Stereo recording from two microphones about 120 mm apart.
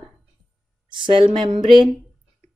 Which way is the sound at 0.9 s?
45° right (ahead or behind).